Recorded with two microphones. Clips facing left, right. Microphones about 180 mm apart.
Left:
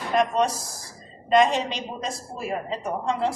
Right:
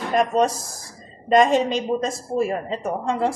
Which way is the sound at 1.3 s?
45° right (ahead or behind).